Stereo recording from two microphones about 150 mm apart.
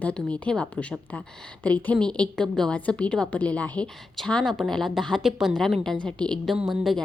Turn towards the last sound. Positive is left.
turn(degrees=0)  # may be behind; listen again after turning